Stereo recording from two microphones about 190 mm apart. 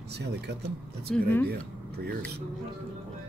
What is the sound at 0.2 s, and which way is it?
Speech, 60° right (ahead or behind).